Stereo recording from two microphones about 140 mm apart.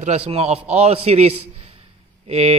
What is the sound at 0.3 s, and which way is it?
A man's voice, 45° right (ahead or behind).